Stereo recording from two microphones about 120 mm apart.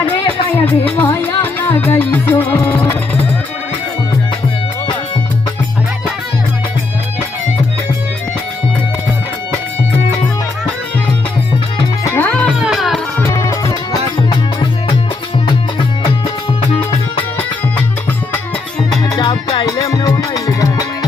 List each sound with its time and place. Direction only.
0.6 s music: 15° left (ahead or behind)
12.0 s music: 20° left (ahead or behind)
12.3 s music: 10° left (ahead or behind)
12.5 s music: 5° right (ahead or behind)
13.2 s music: 30° left (ahead or behind)
14.3 s music: 45° left (ahead or behind)
19.0 s music: 35° left (ahead or behind)